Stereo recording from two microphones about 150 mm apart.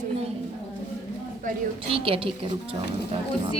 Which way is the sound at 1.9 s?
35° right (ahead or behind).